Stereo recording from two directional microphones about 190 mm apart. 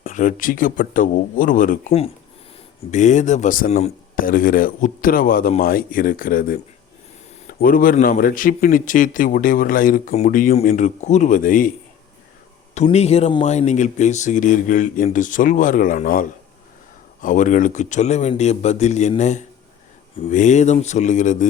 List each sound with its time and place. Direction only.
0.0 s a man's voice: 45° left (ahead or behind)
2.9 s a man's voice: 40° left (ahead or behind)
7.6 s a man's voice: 50° left (ahead or behind)
12.7 s speech: 35° left (ahead or behind)
17.2 s speech: 40° left (ahead or behind)